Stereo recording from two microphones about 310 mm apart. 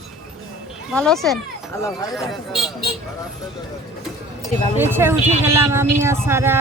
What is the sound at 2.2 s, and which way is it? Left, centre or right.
Speech, centre.